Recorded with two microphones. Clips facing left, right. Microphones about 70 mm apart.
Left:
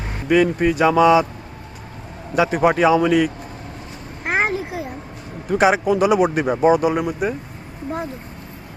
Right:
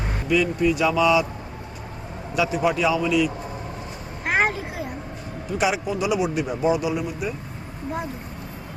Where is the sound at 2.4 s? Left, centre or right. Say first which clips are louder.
Left 5 dB; left.